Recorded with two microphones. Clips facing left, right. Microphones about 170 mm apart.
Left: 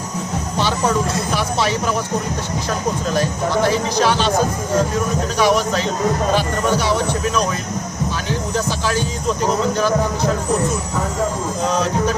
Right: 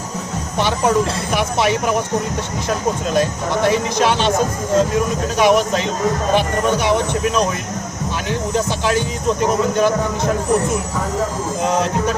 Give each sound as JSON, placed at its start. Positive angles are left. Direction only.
{"t": 3.2, "sound": "speech", "side_deg": -20}
{"t": 5.4, "sound": "speech", "side_deg": -20}
{"t": 11.6, "sound": "speech", "side_deg": -20}